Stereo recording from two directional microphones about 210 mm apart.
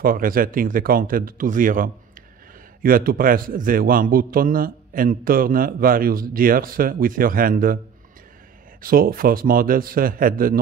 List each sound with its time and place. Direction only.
0.0 s a man's voice: 45° right (ahead or behind)
8.8 s a man's voice: 45° right (ahead or behind)